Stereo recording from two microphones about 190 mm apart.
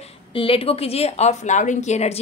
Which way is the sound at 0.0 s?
30° left (ahead or behind).